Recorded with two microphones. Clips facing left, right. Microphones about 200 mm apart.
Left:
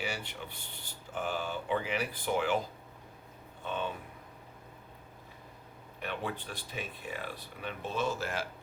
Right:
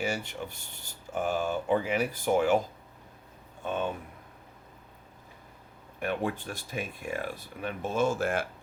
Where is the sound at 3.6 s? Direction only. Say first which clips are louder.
Right 5 dB; 45° right (ahead or behind).